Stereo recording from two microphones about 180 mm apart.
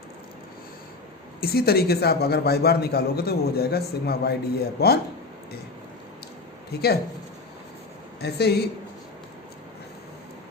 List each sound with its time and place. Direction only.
1.4 s a man's voice: 60° left (ahead or behind)
6.7 s a man's voice: 60° left (ahead or behind)
8.2 s a man's voice: 65° left (ahead or behind)